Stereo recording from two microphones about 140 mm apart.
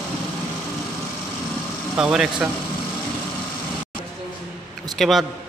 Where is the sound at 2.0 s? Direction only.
5° right (ahead or behind).